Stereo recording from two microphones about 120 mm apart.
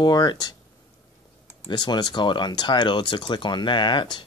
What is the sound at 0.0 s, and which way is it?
Speech, 35° left (ahead or behind).